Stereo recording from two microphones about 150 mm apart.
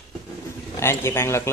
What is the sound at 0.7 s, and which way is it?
Speech, 15° left (ahead or behind).